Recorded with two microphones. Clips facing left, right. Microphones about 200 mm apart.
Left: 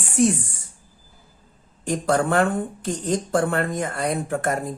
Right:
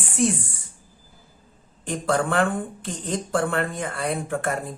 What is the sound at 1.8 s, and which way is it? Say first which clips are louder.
Speech: left 2 dB; 40° left (ahead or behind).